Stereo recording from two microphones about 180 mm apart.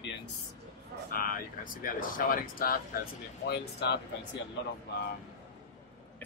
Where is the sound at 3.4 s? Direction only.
65° left (ahead or behind).